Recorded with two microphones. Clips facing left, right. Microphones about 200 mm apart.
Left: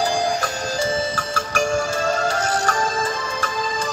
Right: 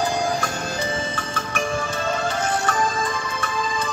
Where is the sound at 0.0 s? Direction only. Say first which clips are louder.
Left 2 dB; 35° left (ahead or behind).